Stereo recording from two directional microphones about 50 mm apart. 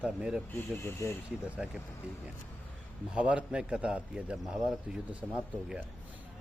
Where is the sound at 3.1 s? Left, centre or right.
Right.